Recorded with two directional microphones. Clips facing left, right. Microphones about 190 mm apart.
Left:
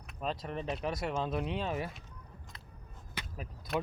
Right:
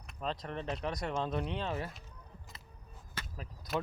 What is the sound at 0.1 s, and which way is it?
Speech, 10° left (ahead or behind).